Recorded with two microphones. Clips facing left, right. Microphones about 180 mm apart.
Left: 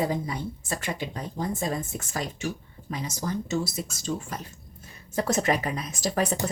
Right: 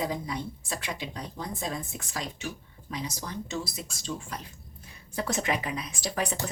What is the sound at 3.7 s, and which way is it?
Speech, 45° left (ahead or behind).